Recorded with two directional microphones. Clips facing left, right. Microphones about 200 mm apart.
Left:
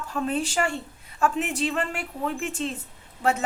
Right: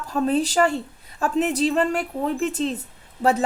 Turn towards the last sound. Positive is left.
turn(degrees=-35)  # may be behind; listen again after turning